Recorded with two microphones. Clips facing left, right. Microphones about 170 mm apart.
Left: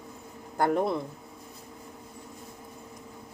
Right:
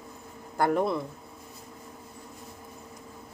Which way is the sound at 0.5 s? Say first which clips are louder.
Even; 20° left (ahead or behind).